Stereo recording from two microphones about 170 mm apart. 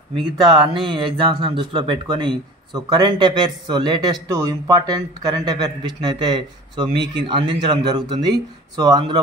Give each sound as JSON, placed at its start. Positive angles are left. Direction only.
{"t": 0.2, "sound": "speech", "side_deg": -25}